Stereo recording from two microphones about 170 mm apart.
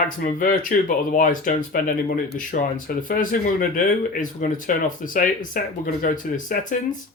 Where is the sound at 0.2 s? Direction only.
50° left (ahead or behind).